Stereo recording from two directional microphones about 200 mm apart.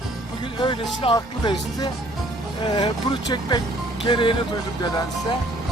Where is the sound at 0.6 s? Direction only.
25° left (ahead or behind).